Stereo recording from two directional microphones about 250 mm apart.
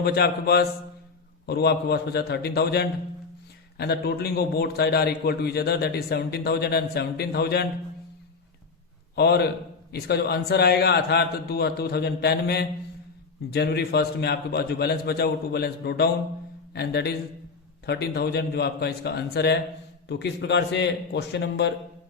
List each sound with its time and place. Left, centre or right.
0.0 s a man's voice: left
9.1 s a man's voice: left